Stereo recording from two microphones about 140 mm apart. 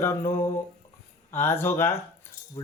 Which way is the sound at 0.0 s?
20° left (ahead or behind).